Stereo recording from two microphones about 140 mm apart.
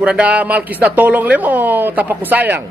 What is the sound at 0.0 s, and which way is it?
Speech, 10° right (ahead or behind).